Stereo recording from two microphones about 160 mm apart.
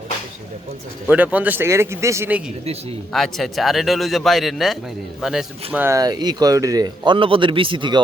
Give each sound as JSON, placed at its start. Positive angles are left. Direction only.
{"t": 1.0, "sound": "speech", "side_deg": -10}
{"t": 3.1, "sound": "a man's voice", "side_deg": 0}
{"t": 5.8, "sound": "speech", "side_deg": -20}